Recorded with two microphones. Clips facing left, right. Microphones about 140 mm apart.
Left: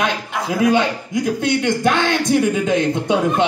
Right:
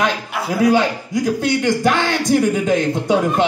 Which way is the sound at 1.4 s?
20° left (ahead or behind).